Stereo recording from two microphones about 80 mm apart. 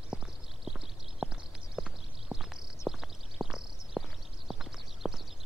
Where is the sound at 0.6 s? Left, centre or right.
Centre.